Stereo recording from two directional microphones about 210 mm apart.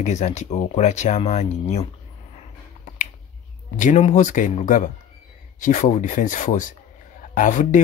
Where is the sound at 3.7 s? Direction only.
35° left (ahead or behind).